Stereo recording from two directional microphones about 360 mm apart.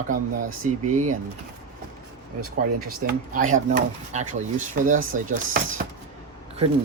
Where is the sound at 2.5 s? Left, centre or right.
Right.